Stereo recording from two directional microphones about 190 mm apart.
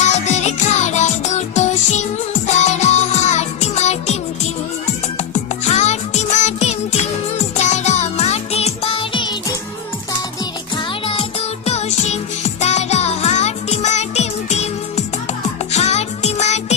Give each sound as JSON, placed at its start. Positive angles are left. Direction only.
{"t": 0.0, "sound": "music", "side_deg": 35}
{"t": 10.8, "sound": "music", "side_deg": 25}